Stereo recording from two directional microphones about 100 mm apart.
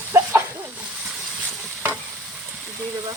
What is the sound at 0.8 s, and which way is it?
Sizzle, 10° right (ahead or behind).